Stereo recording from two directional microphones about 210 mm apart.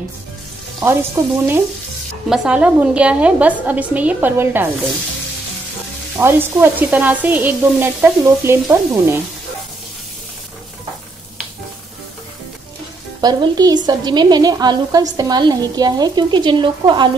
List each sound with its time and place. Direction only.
0.7 s sizzle: 10° right (ahead or behind)
6.1 s sizzle: 10° right (ahead or behind)
13.2 s a woman's voice: 20° right (ahead or behind)